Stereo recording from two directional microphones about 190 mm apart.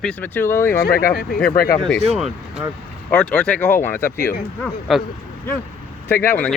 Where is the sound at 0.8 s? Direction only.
50° left (ahead or behind).